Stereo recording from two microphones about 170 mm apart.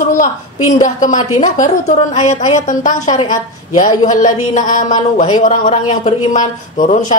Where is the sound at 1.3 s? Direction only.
45° left (ahead or behind).